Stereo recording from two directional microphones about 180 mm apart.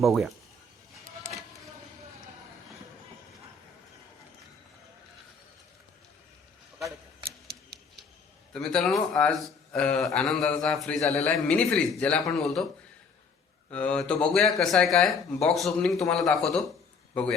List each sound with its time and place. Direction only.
0.0 s speech: centre (ahead or behind)
7.3 s a sound: 60° right (ahead or behind)
8.5 s speech: 5° left (ahead or behind)
13.7 s speech: 5° left (ahead or behind)